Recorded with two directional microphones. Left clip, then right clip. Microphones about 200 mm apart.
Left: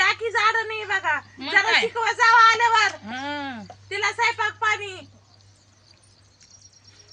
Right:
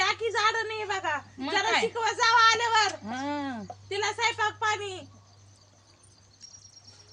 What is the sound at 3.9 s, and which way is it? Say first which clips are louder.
Speech: left 5 dB; 30° right (ahead or behind).